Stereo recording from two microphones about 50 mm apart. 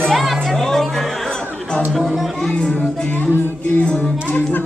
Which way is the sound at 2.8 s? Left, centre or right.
Left.